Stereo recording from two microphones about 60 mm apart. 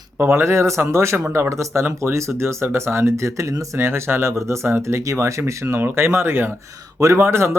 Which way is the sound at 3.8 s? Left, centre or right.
Right.